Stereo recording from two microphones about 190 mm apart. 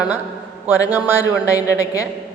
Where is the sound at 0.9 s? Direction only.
10° right (ahead or behind).